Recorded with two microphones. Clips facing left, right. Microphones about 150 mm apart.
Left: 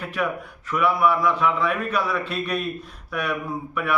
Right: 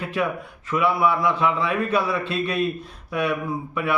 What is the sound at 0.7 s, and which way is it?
A man's voice, 25° right (ahead or behind).